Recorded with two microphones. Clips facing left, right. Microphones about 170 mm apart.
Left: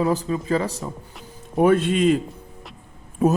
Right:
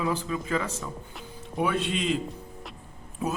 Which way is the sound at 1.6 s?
50° left (ahead or behind).